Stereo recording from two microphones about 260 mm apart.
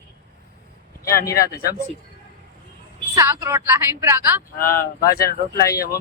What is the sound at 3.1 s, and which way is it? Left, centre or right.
A woman's voice, centre.